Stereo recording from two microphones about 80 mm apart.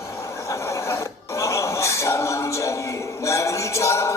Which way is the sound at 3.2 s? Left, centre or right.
Left.